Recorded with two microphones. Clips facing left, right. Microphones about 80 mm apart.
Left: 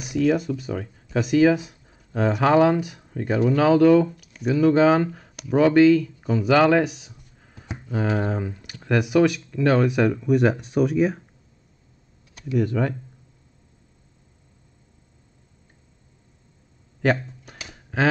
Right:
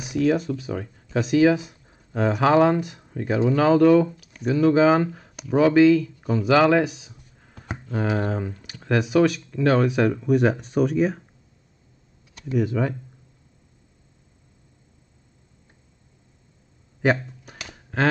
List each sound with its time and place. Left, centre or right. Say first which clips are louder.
0.0 s speech: even; centre
12.5 s speech: even; centre
17.0 s a sound: even; centre